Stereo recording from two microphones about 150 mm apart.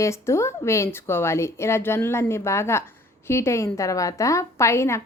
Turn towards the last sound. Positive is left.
turn(degrees=20)  # may be behind; listen again after turning